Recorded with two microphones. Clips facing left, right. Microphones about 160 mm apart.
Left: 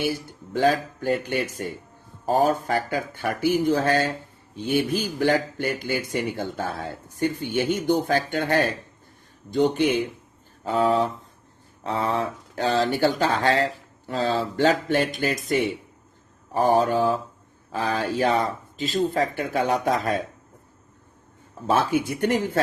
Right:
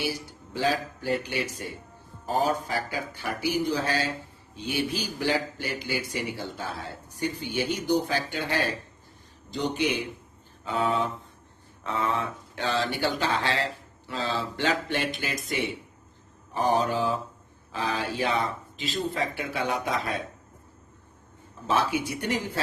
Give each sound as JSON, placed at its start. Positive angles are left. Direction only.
{"t": 0.3, "sound": "speech", "side_deg": 50}
{"t": 10.6, "sound": "speech", "side_deg": 40}
{"t": 21.7, "sound": "speech", "side_deg": 45}